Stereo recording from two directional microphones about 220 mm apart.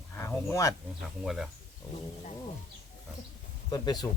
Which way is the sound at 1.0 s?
Centre (ahead or behind).